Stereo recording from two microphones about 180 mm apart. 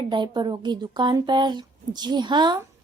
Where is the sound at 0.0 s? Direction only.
25° right (ahead or behind).